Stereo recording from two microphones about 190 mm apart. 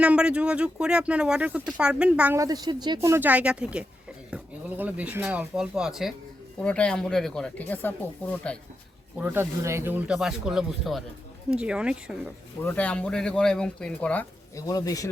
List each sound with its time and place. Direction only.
0.0 s speech: 5° right (ahead or behind); by 8.5 s 10° left (ahead or behind)
9.1 s speech: 10° right (ahead or behind)
12.6 s speech: 5° left (ahead or behind)
14.7 s a man's voice: 20° left (ahead or behind)